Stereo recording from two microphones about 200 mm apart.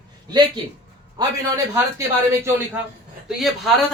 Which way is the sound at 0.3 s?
20° right (ahead or behind).